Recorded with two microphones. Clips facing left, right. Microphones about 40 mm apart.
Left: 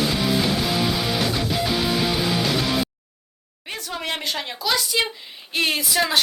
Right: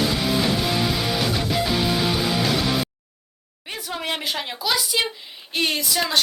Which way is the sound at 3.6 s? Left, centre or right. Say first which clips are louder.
Even; centre.